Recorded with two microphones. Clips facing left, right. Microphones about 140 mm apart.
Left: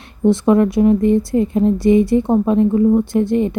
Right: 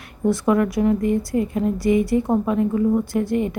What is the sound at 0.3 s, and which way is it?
Speech, 25° left (ahead or behind).